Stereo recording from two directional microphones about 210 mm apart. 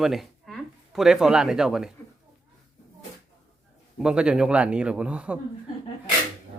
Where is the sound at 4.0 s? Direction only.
5° right (ahead or behind).